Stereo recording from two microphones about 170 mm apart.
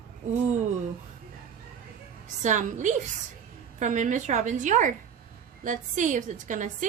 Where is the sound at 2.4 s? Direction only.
45° right (ahead or behind).